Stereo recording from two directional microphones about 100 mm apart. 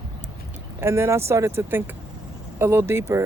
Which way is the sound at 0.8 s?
25° right (ahead or behind).